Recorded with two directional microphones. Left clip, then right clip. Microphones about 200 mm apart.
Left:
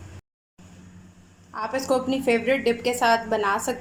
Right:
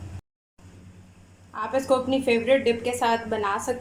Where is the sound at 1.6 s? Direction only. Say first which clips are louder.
Right 1 dB; 5° left (ahead or behind).